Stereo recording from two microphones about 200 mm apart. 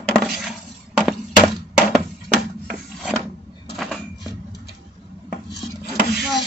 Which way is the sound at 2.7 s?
Centre (ahead or behind).